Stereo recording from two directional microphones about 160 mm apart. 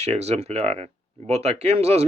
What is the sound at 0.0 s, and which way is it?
Speech, 40° right (ahead or behind).